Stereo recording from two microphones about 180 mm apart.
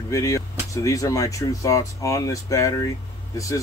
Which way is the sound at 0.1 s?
15° left (ahead or behind).